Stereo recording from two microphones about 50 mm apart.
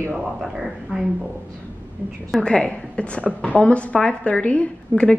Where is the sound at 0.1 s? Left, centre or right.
Centre.